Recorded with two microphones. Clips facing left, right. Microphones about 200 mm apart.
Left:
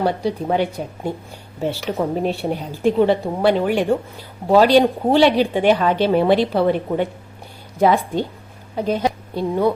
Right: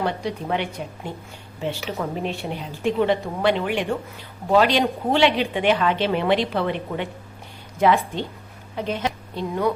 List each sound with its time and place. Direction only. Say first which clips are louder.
0.0 s a woman's voice: left 5 dB; 35° left (ahead or behind)